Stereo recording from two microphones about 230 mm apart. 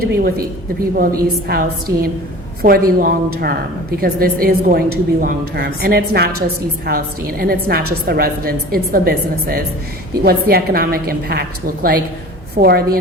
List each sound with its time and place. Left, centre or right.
0.0 s a woman's voice: right